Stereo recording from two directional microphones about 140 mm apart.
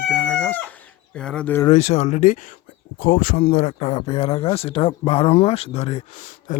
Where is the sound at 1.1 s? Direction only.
5° left (ahead or behind).